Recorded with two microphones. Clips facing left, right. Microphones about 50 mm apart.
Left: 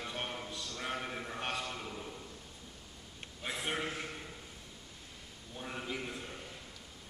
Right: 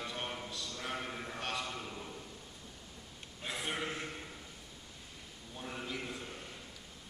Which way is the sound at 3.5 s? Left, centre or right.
Centre.